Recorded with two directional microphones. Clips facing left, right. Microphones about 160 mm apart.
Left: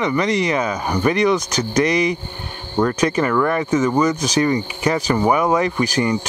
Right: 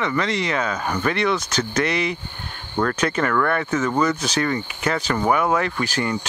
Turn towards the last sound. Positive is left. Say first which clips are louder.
# left 5 dB
turn(degrees=15)  # may be behind; listen again after turning